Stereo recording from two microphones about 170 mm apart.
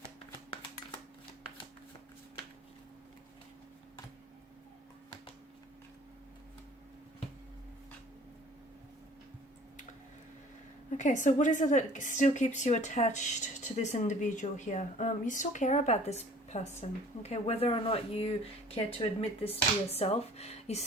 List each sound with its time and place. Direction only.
10.9 s speech: 45° left (ahead or behind)